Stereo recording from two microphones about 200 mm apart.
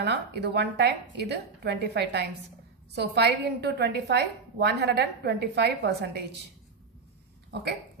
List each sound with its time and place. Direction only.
0.0 s a woman's voice: 60° right (ahead or behind)